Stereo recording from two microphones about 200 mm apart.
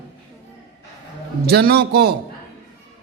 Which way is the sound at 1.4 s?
50° right (ahead or behind).